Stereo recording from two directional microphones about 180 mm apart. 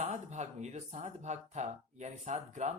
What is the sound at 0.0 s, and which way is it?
Speech, 40° right (ahead or behind).